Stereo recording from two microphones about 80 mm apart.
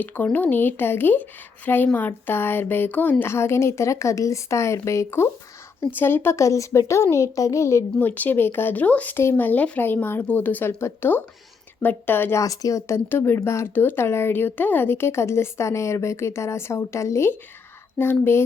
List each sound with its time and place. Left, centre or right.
0.0 s speech: left
7.9 s speech: left
12.4 s speech: left
13.1 s speech: left